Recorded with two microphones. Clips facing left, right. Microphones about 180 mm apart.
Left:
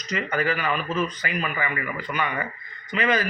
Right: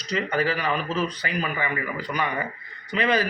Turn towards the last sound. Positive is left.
turn(degrees=-35)  # may be behind; listen again after turning